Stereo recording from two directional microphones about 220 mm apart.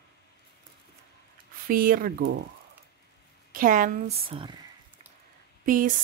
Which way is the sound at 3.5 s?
35° right (ahead or behind).